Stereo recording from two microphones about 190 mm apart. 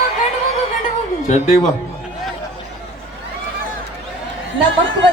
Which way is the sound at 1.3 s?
35° left (ahead or behind).